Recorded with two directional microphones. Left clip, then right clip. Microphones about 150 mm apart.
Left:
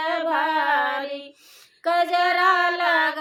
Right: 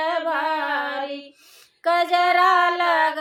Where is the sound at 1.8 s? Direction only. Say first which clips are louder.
Right 1 dB; 10° right (ahead or behind).